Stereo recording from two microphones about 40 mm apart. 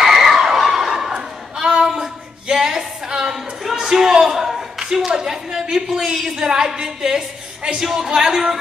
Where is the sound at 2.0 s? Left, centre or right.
Centre.